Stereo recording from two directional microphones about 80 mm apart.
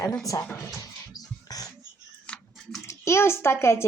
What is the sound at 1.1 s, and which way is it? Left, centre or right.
Music, left.